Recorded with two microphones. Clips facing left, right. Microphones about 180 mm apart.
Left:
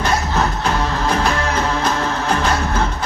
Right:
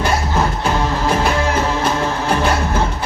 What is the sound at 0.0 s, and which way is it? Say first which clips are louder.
Music: right 1 dB; 10° right (ahead or behind).